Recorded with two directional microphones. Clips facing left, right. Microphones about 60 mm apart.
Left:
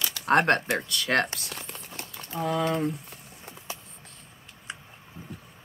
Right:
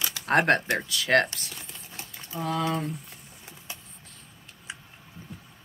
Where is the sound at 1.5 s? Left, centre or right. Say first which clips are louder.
Left 4 dB; left.